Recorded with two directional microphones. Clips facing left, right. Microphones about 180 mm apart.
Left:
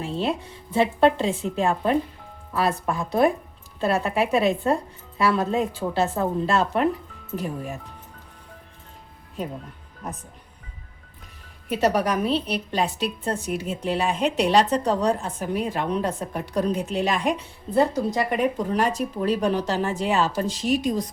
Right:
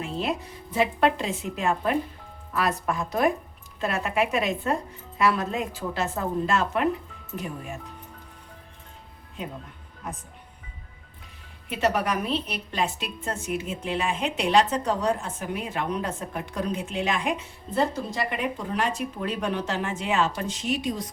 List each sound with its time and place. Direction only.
0.0 s a woman's voice: 30° left (ahead or behind)
11.7 s a woman's voice: 40° left (ahead or behind)